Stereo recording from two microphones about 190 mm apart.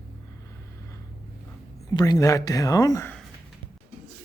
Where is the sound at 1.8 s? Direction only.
20° left (ahead or behind).